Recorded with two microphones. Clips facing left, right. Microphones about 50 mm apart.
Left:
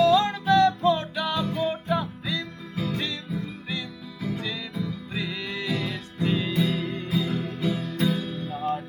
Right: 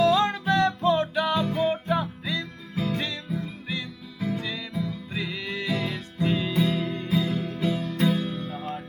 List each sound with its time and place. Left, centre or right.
0.0 s music: right
3.0 s music: centre
6.2 s music: centre
6.5 s music: centre
6.8 s music: centre
7.2 s music: right